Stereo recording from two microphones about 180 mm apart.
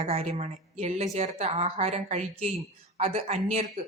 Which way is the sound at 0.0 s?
35° right (ahead or behind).